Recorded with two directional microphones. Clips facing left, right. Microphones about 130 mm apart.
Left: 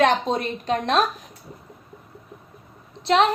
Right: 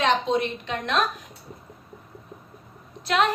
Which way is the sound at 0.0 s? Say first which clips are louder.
Left 2 dB; 45° left (ahead or behind).